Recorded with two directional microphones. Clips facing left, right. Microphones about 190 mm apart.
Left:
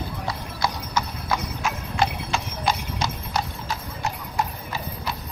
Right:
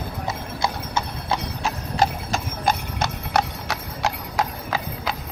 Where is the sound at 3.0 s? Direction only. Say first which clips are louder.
Right 4 dB; 75° right (ahead or behind); by 5.1 s 90° right.